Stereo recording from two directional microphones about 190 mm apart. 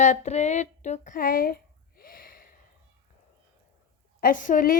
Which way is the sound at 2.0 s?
50° left (ahead or behind).